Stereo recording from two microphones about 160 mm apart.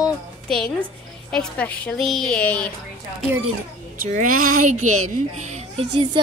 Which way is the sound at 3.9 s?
60° right (ahead or behind).